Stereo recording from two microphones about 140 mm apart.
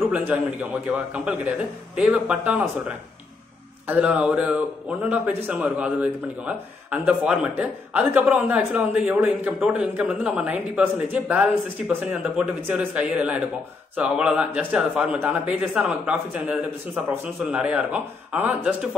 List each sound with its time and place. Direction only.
0.1 s a man's voice: 10° right (ahead or behind)
3.8 s a man's voice: 10° right (ahead or behind)